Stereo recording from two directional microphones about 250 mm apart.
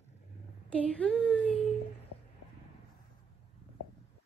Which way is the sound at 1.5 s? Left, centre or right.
Left.